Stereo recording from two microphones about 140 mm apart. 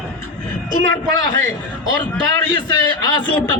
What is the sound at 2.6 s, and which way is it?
Speech, 30° left (ahead or behind).